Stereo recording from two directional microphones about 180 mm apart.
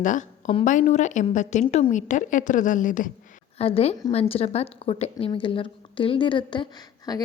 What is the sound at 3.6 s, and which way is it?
A woman's voice, 35° left (ahead or behind).